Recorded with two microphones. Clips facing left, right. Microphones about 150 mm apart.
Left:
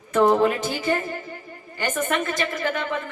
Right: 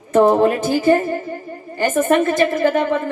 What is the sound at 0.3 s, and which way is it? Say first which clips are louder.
Speech: right 6 dB; 45° right (ahead or behind).